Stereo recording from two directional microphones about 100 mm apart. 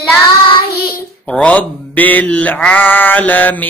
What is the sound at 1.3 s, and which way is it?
Mantra, 15° left (ahead or behind).